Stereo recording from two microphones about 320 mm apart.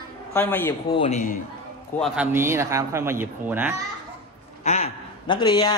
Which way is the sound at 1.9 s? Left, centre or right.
Centre.